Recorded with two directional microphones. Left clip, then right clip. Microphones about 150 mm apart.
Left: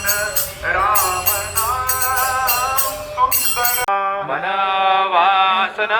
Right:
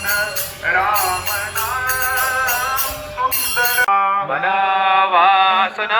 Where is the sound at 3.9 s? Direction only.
10° right (ahead or behind).